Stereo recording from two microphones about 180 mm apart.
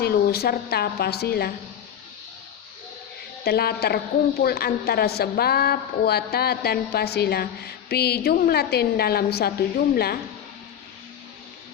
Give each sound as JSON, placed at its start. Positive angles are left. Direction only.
{"t": 0.0, "sound": "a woman's voice", "side_deg": 60}
{"t": 3.4, "sound": "a woman's voice", "side_deg": 60}